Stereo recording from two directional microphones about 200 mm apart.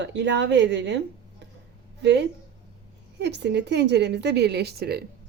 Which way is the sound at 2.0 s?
60° right (ahead or behind).